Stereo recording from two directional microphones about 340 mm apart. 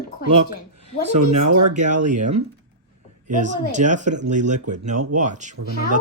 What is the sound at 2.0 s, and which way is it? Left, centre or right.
Speech, right.